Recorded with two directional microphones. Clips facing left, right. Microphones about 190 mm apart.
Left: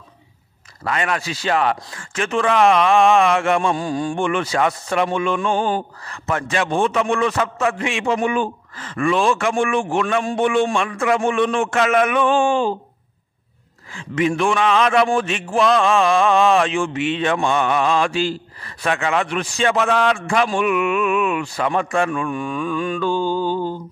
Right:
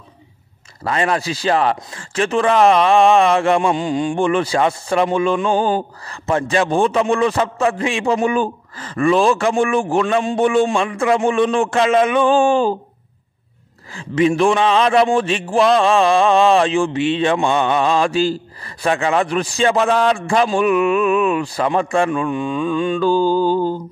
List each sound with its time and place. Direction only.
0.8 s speech: 30° right (ahead or behind)
3.6 s a man's voice: 20° right (ahead or behind)
4.2 s speech: 35° right (ahead or behind)
10.9 s speech: 25° right (ahead or behind); by 12.7 s 40° right (ahead or behind)
13.9 s speech: 30° right (ahead or behind)